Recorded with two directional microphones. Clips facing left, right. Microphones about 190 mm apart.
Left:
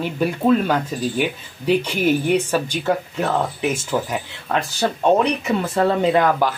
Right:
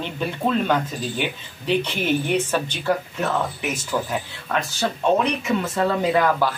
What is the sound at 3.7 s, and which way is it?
Speech, 25° left (ahead or behind).